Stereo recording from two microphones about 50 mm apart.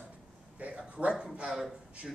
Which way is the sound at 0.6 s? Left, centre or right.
Right.